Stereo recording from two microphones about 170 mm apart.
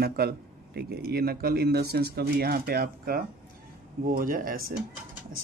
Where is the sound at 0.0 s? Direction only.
65° right (ahead or behind).